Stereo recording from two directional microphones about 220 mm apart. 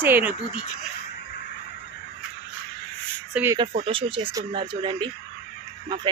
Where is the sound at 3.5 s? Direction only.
25° right (ahead or behind).